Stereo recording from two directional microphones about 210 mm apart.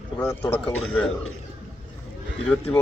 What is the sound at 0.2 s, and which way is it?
Speech, 10° left (ahead or behind).